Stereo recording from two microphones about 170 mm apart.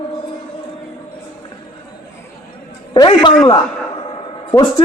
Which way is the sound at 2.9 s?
25° left (ahead or behind).